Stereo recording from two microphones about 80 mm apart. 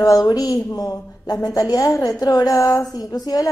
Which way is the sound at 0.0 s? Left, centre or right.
Left.